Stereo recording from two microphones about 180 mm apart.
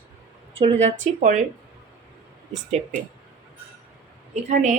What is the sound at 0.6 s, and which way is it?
Speech, 40° right (ahead or behind).